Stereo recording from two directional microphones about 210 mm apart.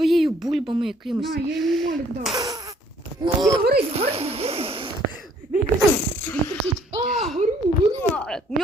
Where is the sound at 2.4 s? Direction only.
20° right (ahead or behind).